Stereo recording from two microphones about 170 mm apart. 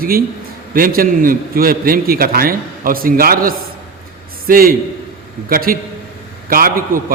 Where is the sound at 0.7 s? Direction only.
55° right (ahead or behind).